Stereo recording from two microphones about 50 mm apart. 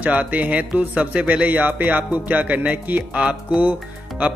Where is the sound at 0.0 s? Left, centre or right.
Right.